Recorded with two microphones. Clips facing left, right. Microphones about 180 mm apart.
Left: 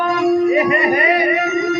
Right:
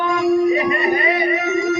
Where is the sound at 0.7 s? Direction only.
70° left (ahead or behind).